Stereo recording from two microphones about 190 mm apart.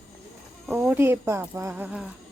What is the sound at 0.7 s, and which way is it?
Speech, 10° right (ahead or behind).